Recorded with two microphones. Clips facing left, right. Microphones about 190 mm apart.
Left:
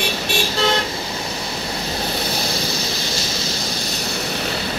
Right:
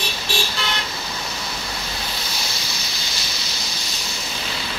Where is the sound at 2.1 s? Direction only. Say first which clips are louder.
Left 8 dB; 60° left (ahead or behind).